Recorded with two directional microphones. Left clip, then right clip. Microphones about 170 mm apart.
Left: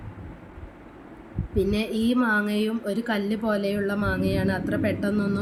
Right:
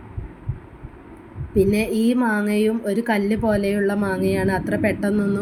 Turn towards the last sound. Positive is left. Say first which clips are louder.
# right 4 dB
turn(degrees=-15)  # may be behind; listen again after turning